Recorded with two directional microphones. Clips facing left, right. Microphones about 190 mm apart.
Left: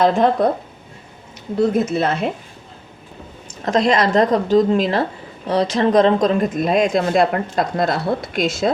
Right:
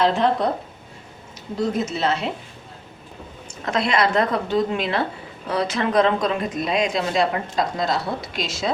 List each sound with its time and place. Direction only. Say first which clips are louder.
0.0 s speech: left 4 dB; 50° left (ahead or behind)
1.5 s speech: left 6 dB; 55° left (ahead or behind)
3.7 s a woman's voice: left 5 dB; 40° left (ahead or behind)
6.2 s speech: left 6 dB; 50° left (ahead or behind)